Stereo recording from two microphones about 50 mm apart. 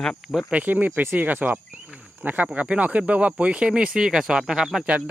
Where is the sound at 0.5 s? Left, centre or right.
Right; by 4.9 s centre.